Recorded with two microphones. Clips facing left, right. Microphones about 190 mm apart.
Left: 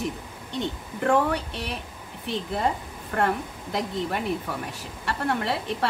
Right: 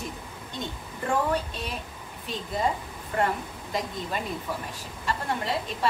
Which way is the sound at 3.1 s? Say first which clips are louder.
Left 2 dB; 65° left (ahead or behind).